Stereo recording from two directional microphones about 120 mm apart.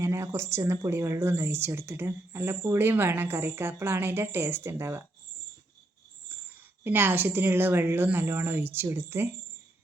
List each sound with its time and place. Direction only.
0.0 s speech: 20° right (ahead or behind)
6.3 s a sound: 20° right (ahead or behind)
6.8 s speech: 15° right (ahead or behind)